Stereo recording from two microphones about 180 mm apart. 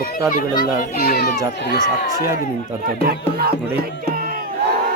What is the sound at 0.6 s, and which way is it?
A child's voice, 55° left (ahead or behind).